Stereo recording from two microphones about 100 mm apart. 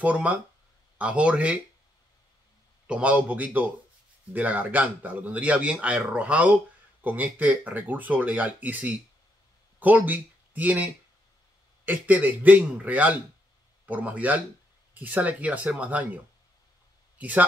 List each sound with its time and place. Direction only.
0.0 s a man's voice: 15° right (ahead or behind)
2.9 s a man's voice: 15° right (ahead or behind)
17.2 s speech: 15° right (ahead or behind)